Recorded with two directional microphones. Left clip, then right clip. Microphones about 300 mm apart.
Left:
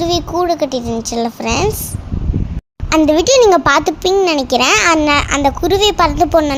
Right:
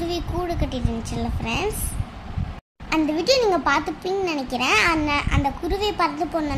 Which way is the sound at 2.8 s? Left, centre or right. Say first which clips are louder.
Left 9 dB; left.